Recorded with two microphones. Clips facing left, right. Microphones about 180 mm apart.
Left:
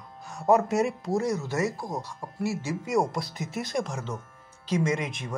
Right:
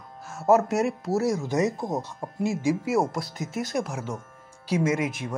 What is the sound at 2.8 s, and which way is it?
Speech, 5° right (ahead or behind).